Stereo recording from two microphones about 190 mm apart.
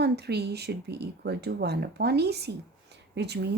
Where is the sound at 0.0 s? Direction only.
60° right (ahead or behind).